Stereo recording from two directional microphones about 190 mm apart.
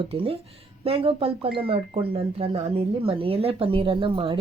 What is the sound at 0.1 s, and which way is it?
Speech, 30° right (ahead or behind).